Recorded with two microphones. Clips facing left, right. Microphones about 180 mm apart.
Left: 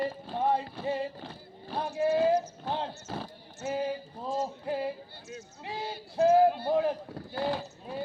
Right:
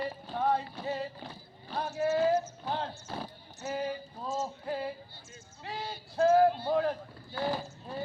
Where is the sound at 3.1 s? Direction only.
Centre (ahead or behind).